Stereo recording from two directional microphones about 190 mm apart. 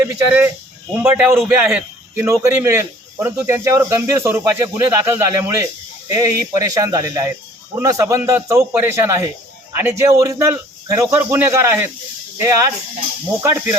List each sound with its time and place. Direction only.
0.0 s a man's voice: 15° right (ahead or behind)